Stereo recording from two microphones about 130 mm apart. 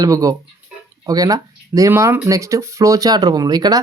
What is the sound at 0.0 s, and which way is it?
Speech, 25° right (ahead or behind).